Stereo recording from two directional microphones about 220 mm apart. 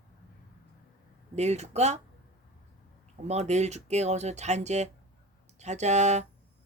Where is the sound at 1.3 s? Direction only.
30° right (ahead or behind).